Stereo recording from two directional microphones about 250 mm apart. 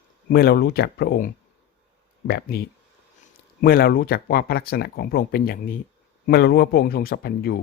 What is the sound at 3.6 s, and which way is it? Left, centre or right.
Speech, left.